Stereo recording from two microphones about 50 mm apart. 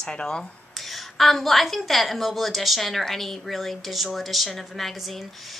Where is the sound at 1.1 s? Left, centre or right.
Centre.